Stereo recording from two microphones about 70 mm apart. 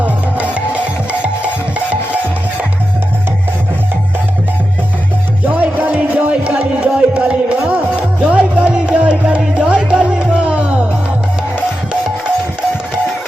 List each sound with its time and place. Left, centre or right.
0.0 s music: centre
5.5 s music: right